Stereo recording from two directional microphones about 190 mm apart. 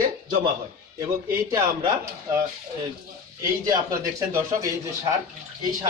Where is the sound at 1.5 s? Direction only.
20° right (ahead or behind).